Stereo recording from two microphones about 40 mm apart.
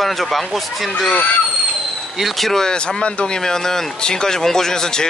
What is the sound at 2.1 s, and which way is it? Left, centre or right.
Speech, centre.